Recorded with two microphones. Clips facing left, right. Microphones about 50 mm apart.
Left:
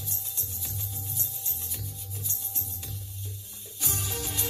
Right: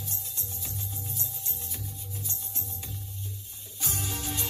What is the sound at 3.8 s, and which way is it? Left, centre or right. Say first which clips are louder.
Music: even; right.